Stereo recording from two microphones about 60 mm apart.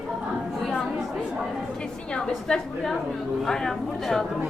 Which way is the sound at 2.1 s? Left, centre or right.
Centre.